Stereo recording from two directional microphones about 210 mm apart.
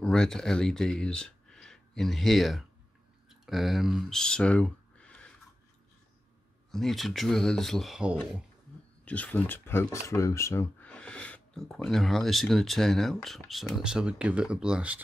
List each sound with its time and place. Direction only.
0.0 s speech: 5° left (ahead or behind)
6.7 s speech: centre (ahead or behind)